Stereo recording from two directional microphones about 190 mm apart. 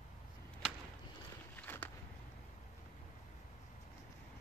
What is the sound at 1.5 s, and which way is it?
Walk, 10° left (ahead or behind).